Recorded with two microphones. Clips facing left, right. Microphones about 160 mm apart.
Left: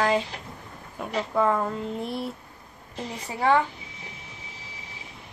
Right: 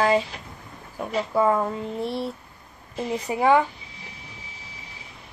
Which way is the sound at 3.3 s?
15° right (ahead or behind).